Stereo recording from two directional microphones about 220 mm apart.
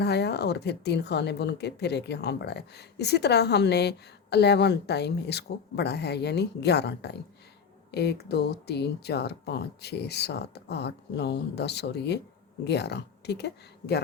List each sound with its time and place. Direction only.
0.0 s speech: 50° left (ahead or behind)